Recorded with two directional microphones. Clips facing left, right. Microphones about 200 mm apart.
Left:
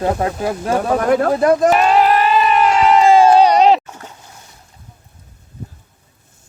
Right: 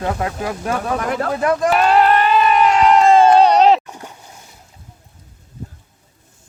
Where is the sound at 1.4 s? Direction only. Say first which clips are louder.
Left 5 dB; 35° left (ahead or behind).